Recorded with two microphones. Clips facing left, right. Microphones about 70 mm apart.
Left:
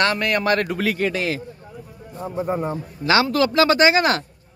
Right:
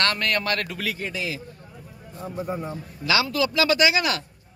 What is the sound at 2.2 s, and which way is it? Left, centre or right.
Speech, left.